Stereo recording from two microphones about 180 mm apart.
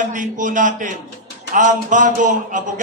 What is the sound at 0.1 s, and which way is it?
A man's voice, 45° right (ahead or behind).